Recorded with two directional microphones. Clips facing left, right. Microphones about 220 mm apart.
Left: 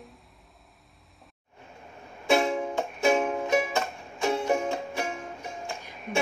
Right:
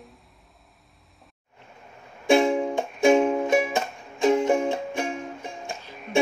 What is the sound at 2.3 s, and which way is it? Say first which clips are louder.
Music: right 5 dB; 20° right (ahead or behind).